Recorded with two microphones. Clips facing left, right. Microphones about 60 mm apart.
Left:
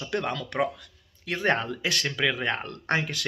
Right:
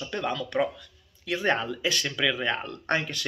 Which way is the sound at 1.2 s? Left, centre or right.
Left.